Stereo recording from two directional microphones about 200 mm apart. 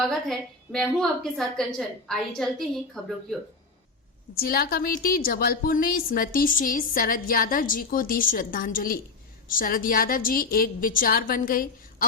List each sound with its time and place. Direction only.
0.0 s a woman's voice: centre (ahead or behind)
4.4 s a woman's voice: 50° left (ahead or behind)